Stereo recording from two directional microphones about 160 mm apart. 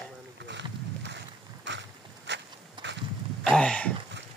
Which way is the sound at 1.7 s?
90° right.